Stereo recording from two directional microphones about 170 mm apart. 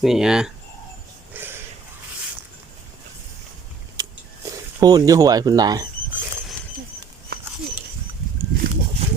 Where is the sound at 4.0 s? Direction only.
20° right (ahead or behind).